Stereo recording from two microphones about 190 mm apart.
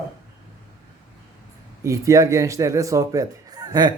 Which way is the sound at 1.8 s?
15° right (ahead or behind).